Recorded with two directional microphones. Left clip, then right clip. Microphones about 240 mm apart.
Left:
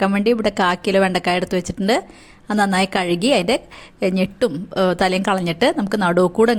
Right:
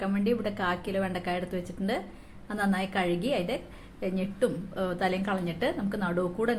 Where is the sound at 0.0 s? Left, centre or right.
Left.